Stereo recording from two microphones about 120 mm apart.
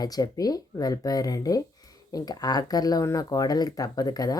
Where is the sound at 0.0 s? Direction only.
30° left (ahead or behind).